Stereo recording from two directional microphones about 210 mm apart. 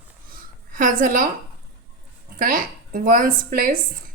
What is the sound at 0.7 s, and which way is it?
Speech, 40° right (ahead or behind).